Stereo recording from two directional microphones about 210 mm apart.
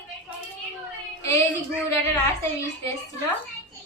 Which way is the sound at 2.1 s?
10° left (ahead or behind).